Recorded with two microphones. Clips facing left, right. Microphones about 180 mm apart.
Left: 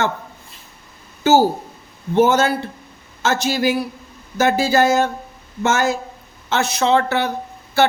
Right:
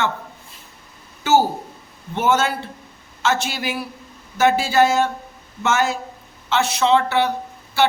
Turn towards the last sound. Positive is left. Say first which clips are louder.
# left 2 dB
turn(degrees=45)  # may be behind; listen again after turning